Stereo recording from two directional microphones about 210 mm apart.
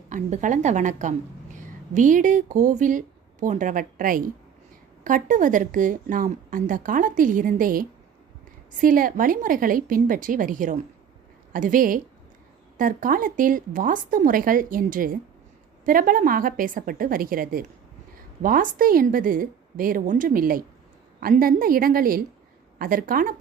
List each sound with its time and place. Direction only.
0.1 s a woman's voice: 35° right (ahead or behind)